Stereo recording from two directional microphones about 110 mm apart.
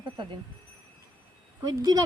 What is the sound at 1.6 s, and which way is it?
Speech, 35° right (ahead or behind).